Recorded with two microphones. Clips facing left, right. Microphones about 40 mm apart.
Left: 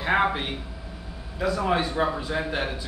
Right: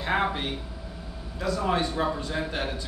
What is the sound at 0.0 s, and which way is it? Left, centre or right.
Speech, centre.